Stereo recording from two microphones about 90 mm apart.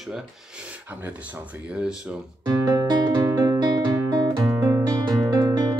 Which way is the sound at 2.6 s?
50° right (ahead or behind).